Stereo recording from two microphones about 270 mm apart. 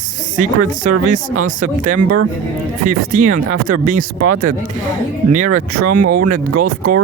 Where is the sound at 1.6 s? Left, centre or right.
Right.